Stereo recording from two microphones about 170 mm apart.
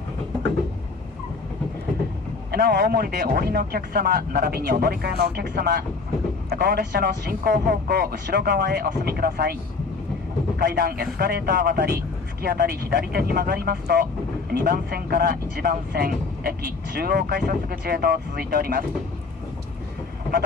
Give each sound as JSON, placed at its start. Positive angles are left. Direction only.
{"t": 2.5, "sound": "speech", "side_deg": -75}
{"t": 10.6, "sound": "speech", "side_deg": -65}